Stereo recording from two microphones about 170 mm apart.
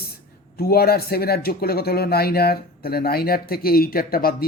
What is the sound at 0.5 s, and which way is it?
Speech, 65° left (ahead or behind).